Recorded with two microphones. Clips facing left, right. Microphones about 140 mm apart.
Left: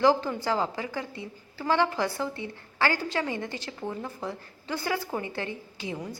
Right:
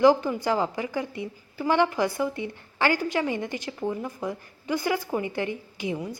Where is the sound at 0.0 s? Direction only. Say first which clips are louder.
Right 4 dB; 15° right (ahead or behind).